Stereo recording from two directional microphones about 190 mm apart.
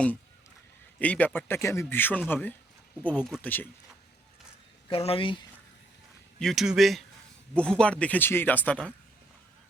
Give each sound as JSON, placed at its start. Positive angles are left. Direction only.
{"t": 0.9, "sound": "speech", "side_deg": 5}
{"t": 4.9, "sound": "speech", "side_deg": 30}
{"t": 6.4, "sound": "a man's voice", "side_deg": 0}